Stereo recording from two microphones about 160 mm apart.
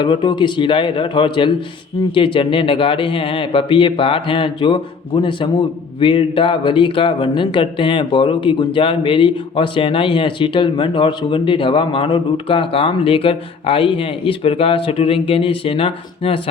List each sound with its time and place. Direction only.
0.0 s speech: 30° left (ahead or behind)